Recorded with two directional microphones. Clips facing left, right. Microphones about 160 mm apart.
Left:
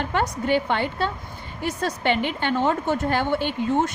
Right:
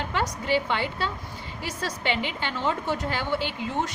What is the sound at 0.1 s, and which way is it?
A woman's voice, 55° left (ahead or behind).